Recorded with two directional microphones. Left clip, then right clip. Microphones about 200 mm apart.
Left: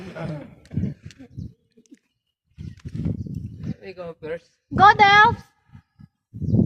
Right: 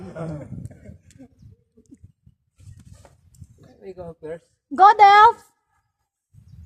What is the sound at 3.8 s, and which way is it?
Speech, 60° right (ahead or behind).